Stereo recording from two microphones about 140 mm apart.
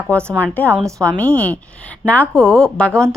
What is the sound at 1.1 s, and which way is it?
Speech, 10° left (ahead or behind).